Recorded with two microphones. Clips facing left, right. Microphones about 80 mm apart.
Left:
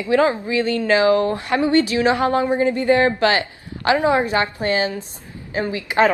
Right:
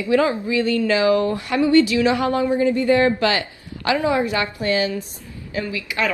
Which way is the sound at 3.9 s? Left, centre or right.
Left.